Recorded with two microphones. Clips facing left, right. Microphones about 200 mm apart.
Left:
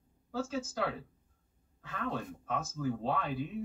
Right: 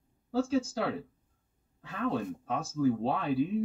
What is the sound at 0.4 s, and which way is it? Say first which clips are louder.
Speech: right 6 dB; 30° right (ahead or behind).